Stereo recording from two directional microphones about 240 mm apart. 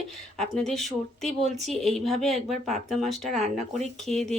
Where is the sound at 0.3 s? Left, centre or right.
Centre.